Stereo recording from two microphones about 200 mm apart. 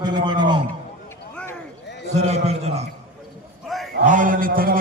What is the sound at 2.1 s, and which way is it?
Speech, 35° right (ahead or behind).